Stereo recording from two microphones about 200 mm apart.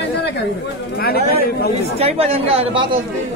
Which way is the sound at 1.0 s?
50° left (ahead or behind).